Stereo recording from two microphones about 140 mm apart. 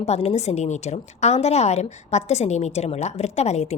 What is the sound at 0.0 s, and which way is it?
A woman's voice, 50° left (ahead or behind).